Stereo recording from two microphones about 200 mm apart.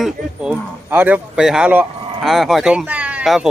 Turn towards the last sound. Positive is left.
turn(degrees=-5)  # may be behind; listen again after turning